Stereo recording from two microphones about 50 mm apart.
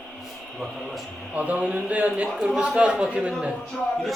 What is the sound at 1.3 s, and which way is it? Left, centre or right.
Speech, right.